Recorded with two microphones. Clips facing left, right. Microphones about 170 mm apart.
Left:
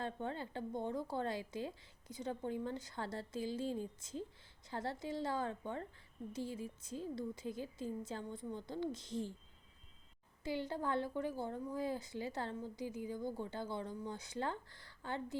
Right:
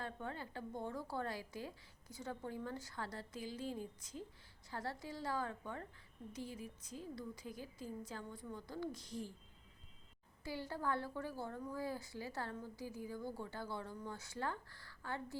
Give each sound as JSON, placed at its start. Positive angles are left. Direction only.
{"t": 0.0, "sound": "a woman's voice", "side_deg": 25}
{"t": 10.4, "sound": "a woman's voice", "side_deg": 20}